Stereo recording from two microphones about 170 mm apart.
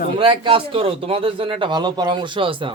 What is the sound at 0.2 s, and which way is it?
A man's voice, 30° right (ahead or behind).